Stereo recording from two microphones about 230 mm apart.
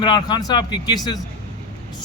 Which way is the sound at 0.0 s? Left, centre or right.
Centre.